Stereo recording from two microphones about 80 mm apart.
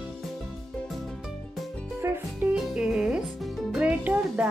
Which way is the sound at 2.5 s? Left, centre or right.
Centre.